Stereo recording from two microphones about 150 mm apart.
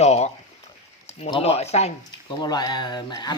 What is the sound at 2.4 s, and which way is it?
Speech, 30° left (ahead or behind).